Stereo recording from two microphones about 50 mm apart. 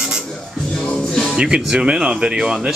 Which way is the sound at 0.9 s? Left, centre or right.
Centre.